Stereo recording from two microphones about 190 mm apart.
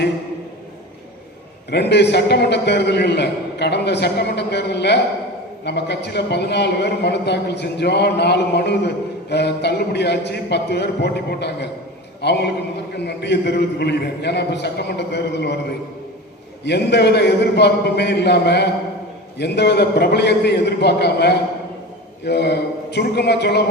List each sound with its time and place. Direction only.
1.7 s a man's voice: 65° left (ahead or behind)
16.6 s a man's voice: 60° left (ahead or behind)